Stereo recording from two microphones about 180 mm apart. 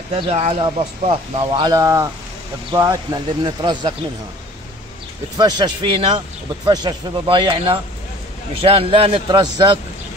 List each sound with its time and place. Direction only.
0.1 s speech: 35° right (ahead or behind)
1.4 s a man's voice: 20° right (ahead or behind)
5.4 s a man's voice: 25° right (ahead or behind)